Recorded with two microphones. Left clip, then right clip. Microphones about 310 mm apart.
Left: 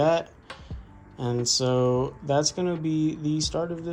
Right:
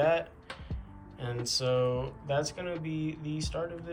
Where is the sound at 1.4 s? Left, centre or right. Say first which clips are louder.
Left 4 dB; centre.